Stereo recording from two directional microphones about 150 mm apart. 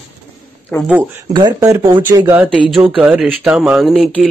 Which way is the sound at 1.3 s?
25° right (ahead or behind).